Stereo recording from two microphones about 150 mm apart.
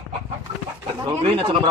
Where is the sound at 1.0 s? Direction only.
35° right (ahead or behind).